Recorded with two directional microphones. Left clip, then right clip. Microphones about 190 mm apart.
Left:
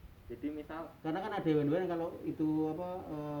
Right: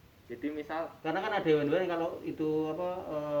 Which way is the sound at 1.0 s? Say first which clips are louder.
Right 5 dB; 45° left (ahead or behind).